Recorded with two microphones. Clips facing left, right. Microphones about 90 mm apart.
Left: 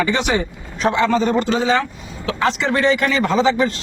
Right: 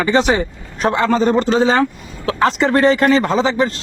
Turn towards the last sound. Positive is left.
turn(degrees=-35)  # may be behind; listen again after turning